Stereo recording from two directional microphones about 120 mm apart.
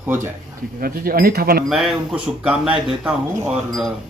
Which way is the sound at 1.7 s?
5° right (ahead or behind).